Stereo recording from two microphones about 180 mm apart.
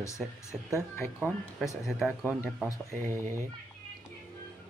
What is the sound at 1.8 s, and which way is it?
Speech, centre (ahead or behind).